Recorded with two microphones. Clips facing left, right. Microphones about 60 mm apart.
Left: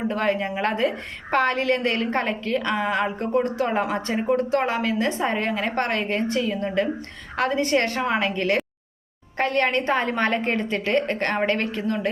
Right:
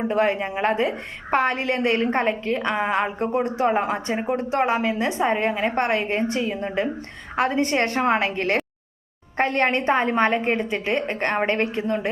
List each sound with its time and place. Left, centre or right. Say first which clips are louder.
0.1 s a woman's voice: right 4 dB; right